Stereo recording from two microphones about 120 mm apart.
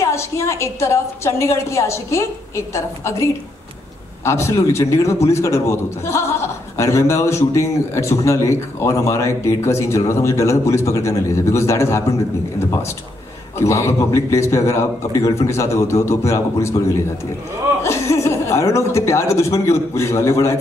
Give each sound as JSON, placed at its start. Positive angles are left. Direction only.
{"t": 0.0, "sound": "speech", "side_deg": 25}
{"t": 13.6, "sound": "speech", "side_deg": 25}